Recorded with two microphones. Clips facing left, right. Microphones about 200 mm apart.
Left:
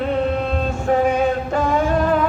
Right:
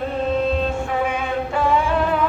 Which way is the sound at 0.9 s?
40° left (ahead or behind).